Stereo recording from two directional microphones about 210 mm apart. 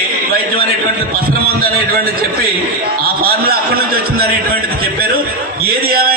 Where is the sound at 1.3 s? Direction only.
45° right (ahead or behind).